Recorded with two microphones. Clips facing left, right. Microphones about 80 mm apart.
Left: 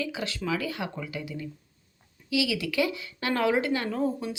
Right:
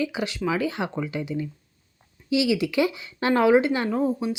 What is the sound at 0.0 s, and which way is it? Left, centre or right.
Speech, centre.